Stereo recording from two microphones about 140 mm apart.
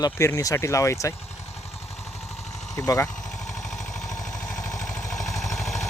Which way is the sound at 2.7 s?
25° left (ahead or behind).